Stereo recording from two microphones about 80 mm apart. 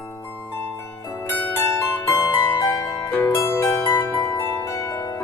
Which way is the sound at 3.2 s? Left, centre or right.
Left.